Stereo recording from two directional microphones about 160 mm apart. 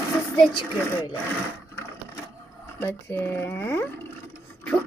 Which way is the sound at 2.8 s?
15° left (ahead or behind).